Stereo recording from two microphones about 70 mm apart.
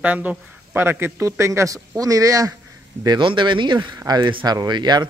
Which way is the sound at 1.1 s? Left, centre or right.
Right.